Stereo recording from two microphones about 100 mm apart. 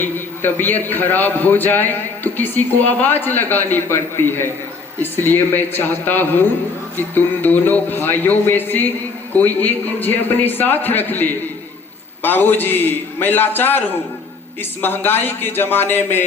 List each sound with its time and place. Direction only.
0.0 s a man's voice: 20° left (ahead or behind)